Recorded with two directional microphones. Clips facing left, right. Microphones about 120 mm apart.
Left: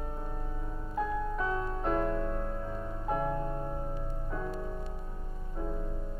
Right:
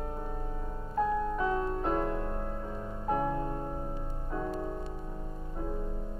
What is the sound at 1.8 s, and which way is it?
Music, 5° right (ahead or behind).